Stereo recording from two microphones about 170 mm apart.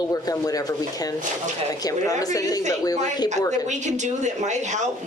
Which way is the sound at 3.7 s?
45° right (ahead or behind).